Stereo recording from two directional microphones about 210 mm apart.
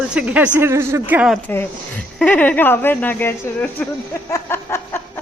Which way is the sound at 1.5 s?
5° left (ahead or behind).